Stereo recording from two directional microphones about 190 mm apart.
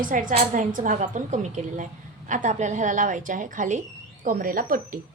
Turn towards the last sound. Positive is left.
turn(degrees=-50)  # may be behind; listen again after turning